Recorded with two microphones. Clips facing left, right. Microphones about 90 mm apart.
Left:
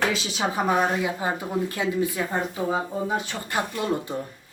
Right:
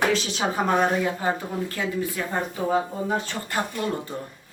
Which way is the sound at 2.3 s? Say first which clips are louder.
Right 1 dB; 10° left (ahead or behind).